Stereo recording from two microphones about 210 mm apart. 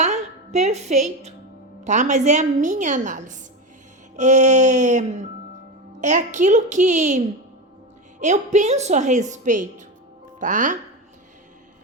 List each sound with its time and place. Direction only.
0.0 s a woman's voice: 35° right (ahead or behind)
8.2 s a woman's voice: 35° right (ahead or behind)